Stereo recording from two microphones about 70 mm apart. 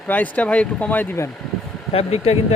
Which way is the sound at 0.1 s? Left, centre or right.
Left.